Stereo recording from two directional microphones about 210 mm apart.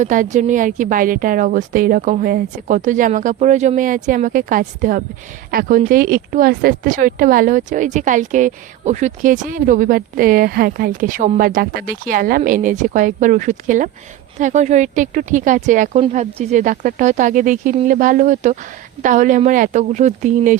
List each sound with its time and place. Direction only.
0.0 s speech: 35° right (ahead or behind)